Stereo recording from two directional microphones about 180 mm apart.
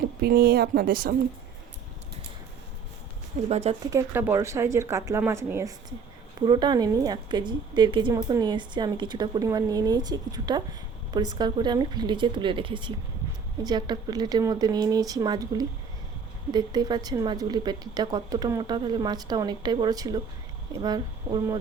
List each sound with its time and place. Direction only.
0.2 s speech: 60° right (ahead or behind)
3.5 s speech: 35° right (ahead or behind)
3.8 s a woman's voice: 15° right (ahead or behind)